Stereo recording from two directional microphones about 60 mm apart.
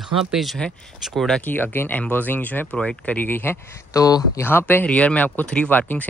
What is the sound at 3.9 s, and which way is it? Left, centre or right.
Speech, left.